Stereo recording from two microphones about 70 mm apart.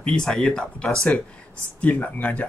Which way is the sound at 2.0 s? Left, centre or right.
Left.